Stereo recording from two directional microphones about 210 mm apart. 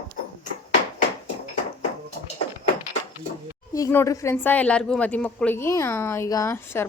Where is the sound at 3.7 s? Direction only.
15° left (ahead or behind).